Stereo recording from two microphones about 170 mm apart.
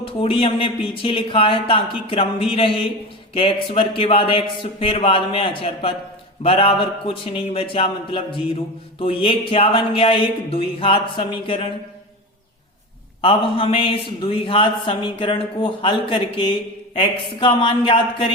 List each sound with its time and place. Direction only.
0.0 s a man's voice: 35° left (ahead or behind)
13.2 s a man's voice: 30° left (ahead or behind)